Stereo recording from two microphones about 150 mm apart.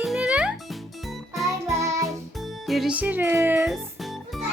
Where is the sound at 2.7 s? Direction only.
5° right (ahead or behind).